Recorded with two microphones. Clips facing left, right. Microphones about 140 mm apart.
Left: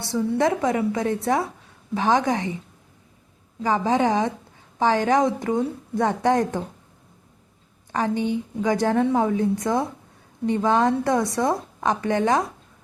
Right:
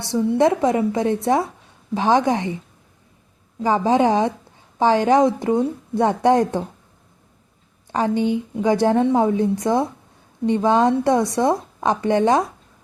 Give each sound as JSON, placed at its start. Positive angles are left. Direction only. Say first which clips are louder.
{"t": 0.1, "sound": "a woman's voice", "louder": "right 4 dB", "side_deg": -25}
{"t": 3.6, "sound": "a woman's voice", "louder": "right 4 dB", "side_deg": -30}
{"t": 7.9, "sound": "a woman's voice", "louder": "right 4 dB", "side_deg": -25}